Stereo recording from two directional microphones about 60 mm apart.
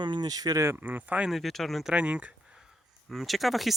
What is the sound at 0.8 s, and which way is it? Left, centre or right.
Speech, right.